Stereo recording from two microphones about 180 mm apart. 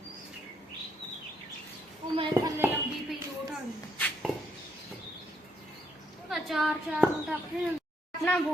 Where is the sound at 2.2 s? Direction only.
25° right (ahead or behind).